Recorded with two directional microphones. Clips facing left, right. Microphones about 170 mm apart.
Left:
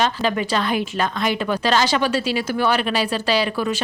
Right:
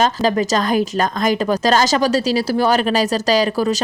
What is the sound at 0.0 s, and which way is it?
A woman's voice, 40° right (ahead or behind).